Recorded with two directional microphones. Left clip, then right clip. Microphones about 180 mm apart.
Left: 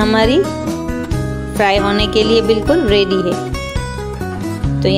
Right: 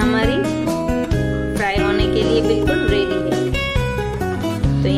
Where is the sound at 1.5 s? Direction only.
40° left (ahead or behind).